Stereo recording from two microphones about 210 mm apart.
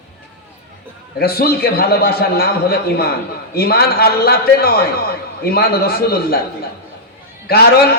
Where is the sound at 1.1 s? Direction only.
50° left (ahead or behind).